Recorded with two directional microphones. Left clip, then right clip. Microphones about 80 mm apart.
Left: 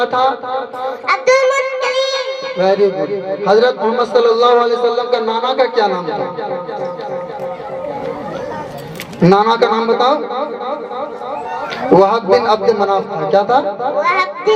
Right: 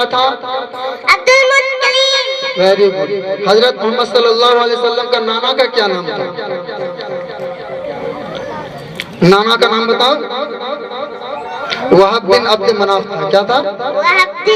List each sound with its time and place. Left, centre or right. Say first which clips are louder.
0.0 s speech: right 1 dB; right
9.2 s a man's voice: right 2 dB; right
11.8 s a man's voice: right 1 dB; right